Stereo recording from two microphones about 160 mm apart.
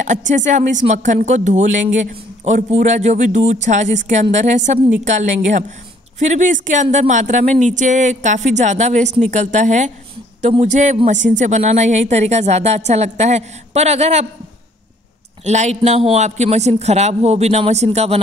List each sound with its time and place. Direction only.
0.0 s speech: 50° right (ahead or behind)
15.4 s speech: 45° right (ahead or behind)